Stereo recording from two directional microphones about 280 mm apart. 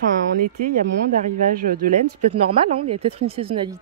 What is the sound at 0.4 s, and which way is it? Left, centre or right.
Speech, right.